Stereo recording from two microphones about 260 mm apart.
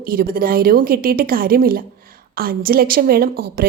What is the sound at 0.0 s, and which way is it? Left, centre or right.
Speech, right.